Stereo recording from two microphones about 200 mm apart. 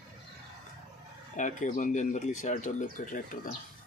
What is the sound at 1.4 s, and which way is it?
Speech, 40° left (ahead or behind).